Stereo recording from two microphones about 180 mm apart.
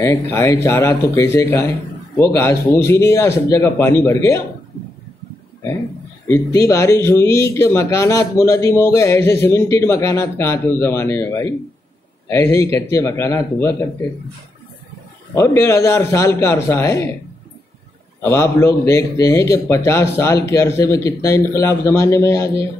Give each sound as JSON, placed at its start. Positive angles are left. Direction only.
{"t": 0.0, "sound": "speech", "side_deg": 15}
{"t": 6.2, "sound": "speech", "side_deg": 15}
{"t": 15.3, "sound": "speech", "side_deg": 15}
{"t": 18.2, "sound": "speech", "side_deg": 15}